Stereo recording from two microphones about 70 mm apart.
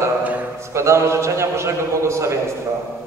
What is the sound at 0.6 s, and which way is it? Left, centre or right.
A man's voice, right.